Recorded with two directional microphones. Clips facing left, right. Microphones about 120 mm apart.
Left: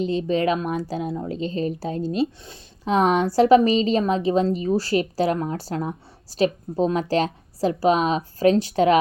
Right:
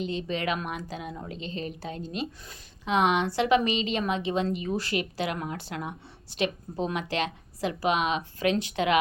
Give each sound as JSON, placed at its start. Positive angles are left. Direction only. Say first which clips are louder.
{"t": 0.0, "sound": "a woman's voice", "louder": "left 8 dB", "side_deg": 35}